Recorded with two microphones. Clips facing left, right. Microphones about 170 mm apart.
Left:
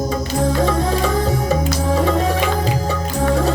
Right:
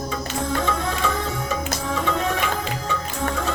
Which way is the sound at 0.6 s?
35° left (ahead or behind).